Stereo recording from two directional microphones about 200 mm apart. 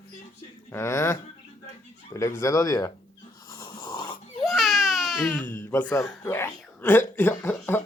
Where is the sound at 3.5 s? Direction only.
20° left (ahead or behind).